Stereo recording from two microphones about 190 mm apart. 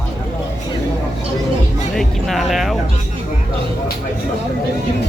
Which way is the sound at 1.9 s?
Centre (ahead or behind).